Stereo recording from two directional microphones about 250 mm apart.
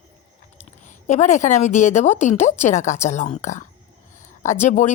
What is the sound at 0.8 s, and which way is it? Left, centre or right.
A woman's voice, left.